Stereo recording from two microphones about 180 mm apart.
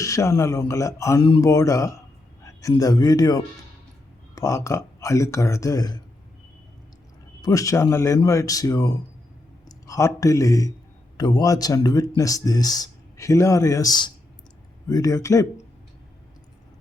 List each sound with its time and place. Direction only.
0.0 s a man's voice: 15° left (ahead or behind)
7.4 s a man's voice: 20° left (ahead or behind)